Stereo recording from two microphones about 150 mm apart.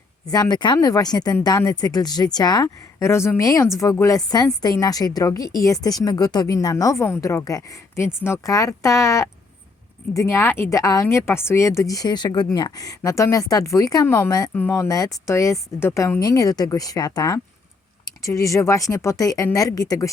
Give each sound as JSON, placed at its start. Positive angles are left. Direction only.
{"t": 0.3, "sound": "speech", "side_deg": 25}